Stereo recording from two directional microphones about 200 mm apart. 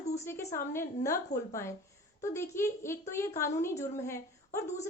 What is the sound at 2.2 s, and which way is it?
A woman's voice, 15° left (ahead or behind).